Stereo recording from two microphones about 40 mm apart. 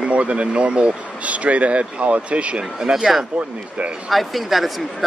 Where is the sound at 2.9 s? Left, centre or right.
Centre.